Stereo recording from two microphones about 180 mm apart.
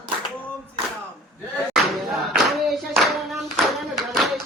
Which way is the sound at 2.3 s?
Centre (ahead or behind).